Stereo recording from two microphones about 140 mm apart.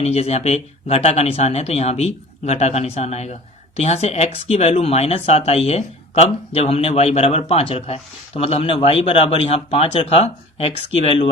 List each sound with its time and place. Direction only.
0.0 s speech: 45° left (ahead or behind)